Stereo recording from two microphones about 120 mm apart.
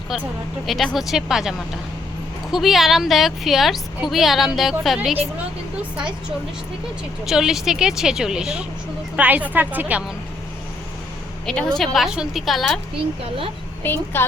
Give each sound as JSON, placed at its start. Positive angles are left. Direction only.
{"t": 0.7, "sound": "a woman's voice", "side_deg": 0}
{"t": 7.3, "sound": "a woman's voice", "side_deg": -5}
{"t": 11.4, "sound": "a woman's voice", "side_deg": 5}
{"t": 13.8, "sound": "a woman's voice", "side_deg": 20}